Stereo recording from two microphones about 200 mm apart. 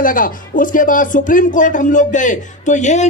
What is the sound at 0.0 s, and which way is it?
Speech, 45° left (ahead or behind).